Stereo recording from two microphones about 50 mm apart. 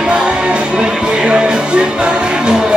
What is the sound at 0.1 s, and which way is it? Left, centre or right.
Music, centre.